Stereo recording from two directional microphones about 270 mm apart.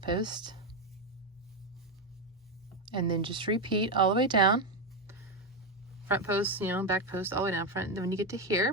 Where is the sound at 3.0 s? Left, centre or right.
Centre.